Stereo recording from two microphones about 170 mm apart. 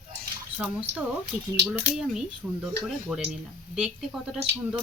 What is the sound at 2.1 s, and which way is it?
Speech, 5° right (ahead or behind).